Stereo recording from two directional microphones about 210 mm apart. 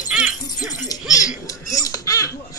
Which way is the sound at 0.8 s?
15° left (ahead or behind).